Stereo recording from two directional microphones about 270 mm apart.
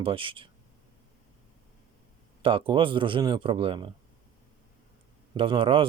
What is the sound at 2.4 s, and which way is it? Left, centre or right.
Speech, centre.